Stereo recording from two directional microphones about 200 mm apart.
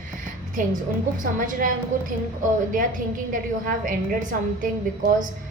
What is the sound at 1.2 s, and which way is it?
Speech, 40° right (ahead or behind).